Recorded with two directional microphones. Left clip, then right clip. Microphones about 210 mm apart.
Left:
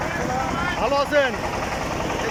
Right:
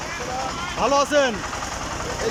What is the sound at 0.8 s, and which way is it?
Speech, 10° right (ahead or behind).